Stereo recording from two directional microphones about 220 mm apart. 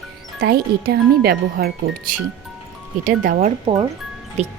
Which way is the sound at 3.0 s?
40° right (ahead or behind).